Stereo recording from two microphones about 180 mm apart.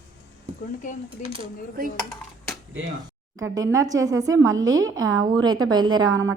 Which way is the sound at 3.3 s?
20° right (ahead or behind).